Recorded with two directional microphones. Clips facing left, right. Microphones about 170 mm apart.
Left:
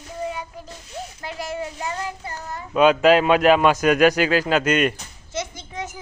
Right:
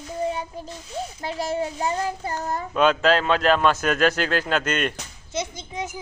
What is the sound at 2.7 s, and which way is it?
A man's voice, 10° left (ahead or behind).